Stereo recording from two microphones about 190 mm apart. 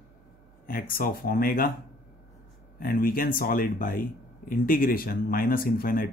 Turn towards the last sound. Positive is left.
turn(degrees=50)  # may be behind; listen again after turning